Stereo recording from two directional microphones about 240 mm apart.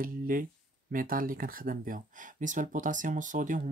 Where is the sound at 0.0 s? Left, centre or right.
Right.